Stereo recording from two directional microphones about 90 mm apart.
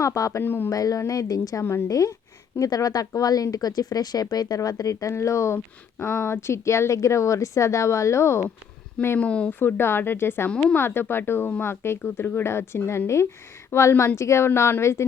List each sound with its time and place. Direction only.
0.0 s speech: 35° left (ahead or behind)
0.7 s speech: 40° left (ahead or behind)
9.0 s speech: 20° left (ahead or behind)
10.5 s speech: 10° left (ahead or behind)
10.8 s a woman's voice: 25° left (ahead or behind)